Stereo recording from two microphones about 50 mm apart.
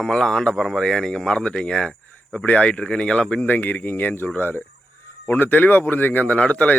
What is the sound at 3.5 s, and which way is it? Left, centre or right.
Speech, left.